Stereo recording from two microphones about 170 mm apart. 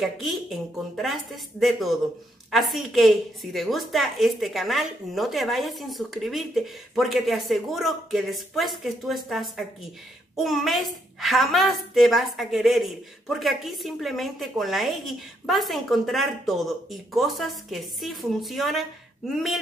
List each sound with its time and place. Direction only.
0.0 s a child's voice: centre (ahead or behind)